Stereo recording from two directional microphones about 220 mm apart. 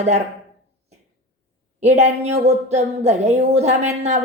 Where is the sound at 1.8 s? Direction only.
30° right (ahead or behind).